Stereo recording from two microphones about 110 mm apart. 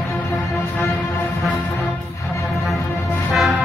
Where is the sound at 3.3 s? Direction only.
10° right (ahead or behind).